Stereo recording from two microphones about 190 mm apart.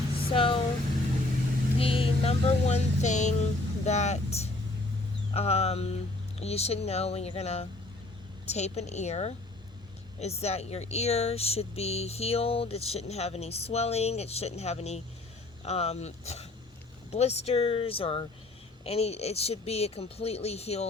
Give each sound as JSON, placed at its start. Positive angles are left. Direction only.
{"t": 0.2, "sound": "a sound", "side_deg": 30}
{"t": 1.8, "sound": "vehicle", "side_deg": 30}
{"t": 5.3, "sound": "speech", "side_deg": 35}